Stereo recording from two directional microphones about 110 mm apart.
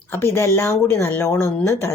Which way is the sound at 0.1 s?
20° left (ahead or behind).